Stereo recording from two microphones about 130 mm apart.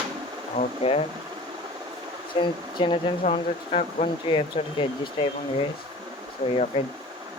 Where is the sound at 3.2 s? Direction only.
60° left (ahead or behind); by 4.9 s 40° left (ahead or behind).